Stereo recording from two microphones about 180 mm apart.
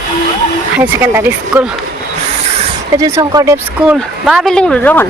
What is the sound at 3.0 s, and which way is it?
Speech, 20° right (ahead or behind).